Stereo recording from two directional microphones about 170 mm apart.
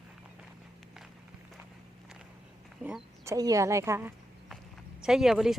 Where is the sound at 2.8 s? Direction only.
5° right (ahead or behind).